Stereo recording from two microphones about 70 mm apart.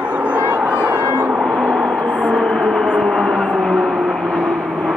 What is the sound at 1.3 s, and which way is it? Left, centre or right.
Gong, centre.